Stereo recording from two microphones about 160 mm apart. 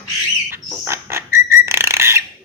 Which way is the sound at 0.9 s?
15° right (ahead or behind).